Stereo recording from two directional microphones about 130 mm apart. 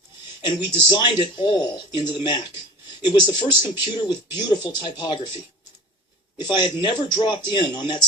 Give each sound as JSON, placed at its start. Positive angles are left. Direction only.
{"t": 0.4, "sound": "speech", "side_deg": 35}
{"t": 6.4, "sound": "speech", "side_deg": 35}